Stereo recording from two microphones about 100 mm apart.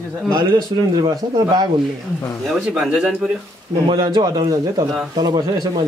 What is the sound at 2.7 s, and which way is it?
Speech, 10° right (ahead or behind).